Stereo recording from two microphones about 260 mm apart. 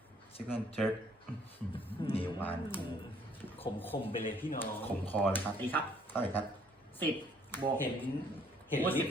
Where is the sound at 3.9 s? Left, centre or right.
Centre.